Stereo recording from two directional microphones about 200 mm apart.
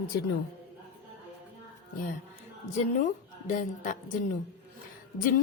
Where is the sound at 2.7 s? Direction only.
40° left (ahead or behind).